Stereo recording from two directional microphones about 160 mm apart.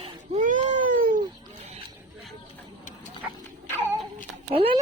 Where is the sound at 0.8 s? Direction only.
55° right (ahead or behind).